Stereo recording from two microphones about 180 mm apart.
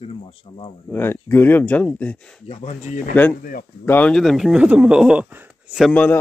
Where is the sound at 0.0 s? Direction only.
30° left (ahead or behind).